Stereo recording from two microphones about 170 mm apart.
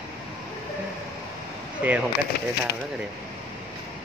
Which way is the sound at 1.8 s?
10° right (ahead or behind).